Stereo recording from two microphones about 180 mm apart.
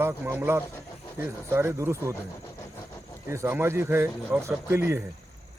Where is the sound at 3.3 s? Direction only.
15° right (ahead or behind).